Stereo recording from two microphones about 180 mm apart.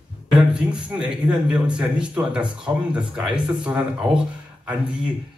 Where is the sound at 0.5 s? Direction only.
5° right (ahead or behind).